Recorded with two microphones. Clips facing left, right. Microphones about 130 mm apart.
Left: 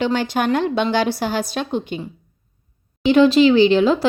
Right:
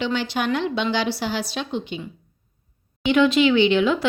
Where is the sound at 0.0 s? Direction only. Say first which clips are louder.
Left 4 dB; 45° left (ahead or behind).